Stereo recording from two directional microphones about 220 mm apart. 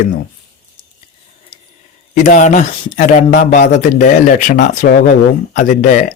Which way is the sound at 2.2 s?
35° left (ahead or behind).